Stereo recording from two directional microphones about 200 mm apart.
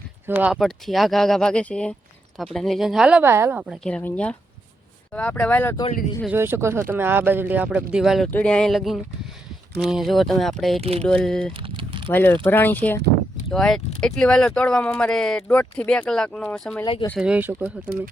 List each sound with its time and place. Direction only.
0.3 s speech: 5° right (ahead or behind)
6.2 s speech: 10° right (ahead or behind)
10.8 s speech: 30° right (ahead or behind)
11.0 s speech: 5° left (ahead or behind)
11.5 s typing: 25° right (ahead or behind)
12.0 s speech: 10° left (ahead or behind)
16.8 s speech: 25° left (ahead or behind)
17.2 s speech: 5° right (ahead or behind)